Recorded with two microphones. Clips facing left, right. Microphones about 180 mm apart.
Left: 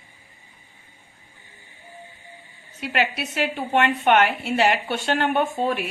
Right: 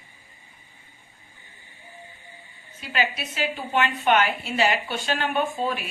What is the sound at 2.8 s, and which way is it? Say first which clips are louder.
A woman's voice: left 3 dB; 65° left (ahead or behind).